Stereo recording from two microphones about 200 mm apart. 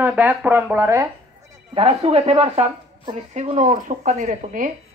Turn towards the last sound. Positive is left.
turn(degrees=-40)  # may be behind; listen again after turning